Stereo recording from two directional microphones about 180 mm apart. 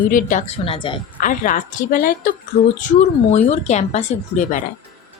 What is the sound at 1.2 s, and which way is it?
A woman's voice, 45° left (ahead or behind).